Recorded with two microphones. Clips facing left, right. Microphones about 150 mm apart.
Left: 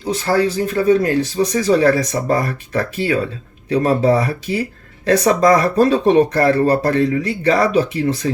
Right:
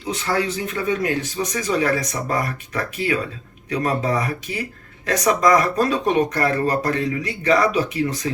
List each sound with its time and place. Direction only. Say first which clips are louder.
0.0 s speech: left 6 dB; 35° left (ahead or behind)